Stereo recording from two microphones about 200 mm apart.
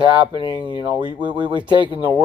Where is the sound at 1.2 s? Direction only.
25° right (ahead or behind).